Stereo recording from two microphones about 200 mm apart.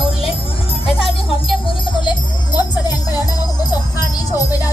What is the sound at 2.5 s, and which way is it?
Music, 20° left (ahead or behind).